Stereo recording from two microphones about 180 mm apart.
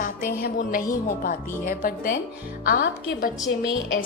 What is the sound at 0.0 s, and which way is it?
Music, 55° left (ahead or behind).